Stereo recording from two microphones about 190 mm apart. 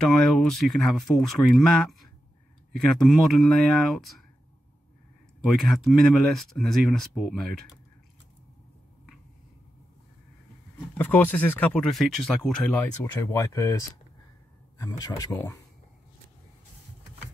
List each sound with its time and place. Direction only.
0.0 s speech: centre (ahead or behind)
5.4 s speech: centre (ahead or behind)
11.0 s speech: 10° left (ahead or behind)
12.8 s speech: 15° left (ahead or behind)